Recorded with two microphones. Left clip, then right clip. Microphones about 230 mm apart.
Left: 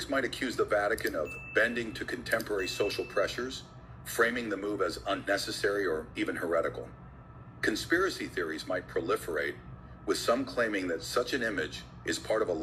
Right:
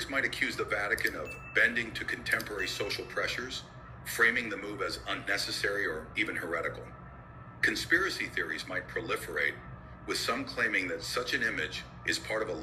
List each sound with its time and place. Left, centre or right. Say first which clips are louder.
0.1 s speech: right 1 dB; left